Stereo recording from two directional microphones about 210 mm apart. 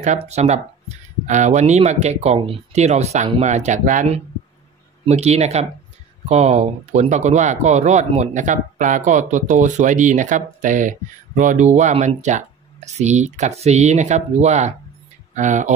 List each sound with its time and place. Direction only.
0.0 s speech: 35° right (ahead or behind)